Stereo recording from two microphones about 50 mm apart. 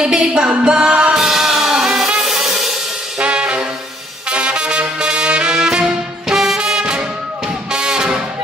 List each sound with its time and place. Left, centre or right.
0.0 s music: centre
1.1 s music: centre
3.2 s brass instrument: centre
4.3 s music: right